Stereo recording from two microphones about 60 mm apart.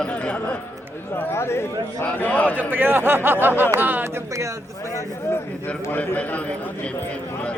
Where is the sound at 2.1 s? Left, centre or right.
Left.